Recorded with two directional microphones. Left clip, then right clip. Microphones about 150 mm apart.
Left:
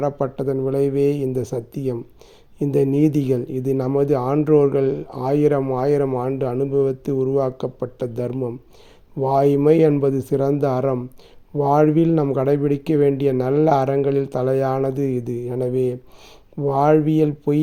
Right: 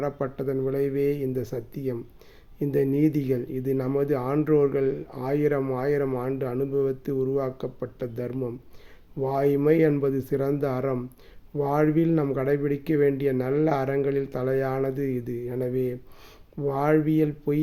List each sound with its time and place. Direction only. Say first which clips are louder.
0.0 s speech: left 7 dB; 35° left (ahead or behind)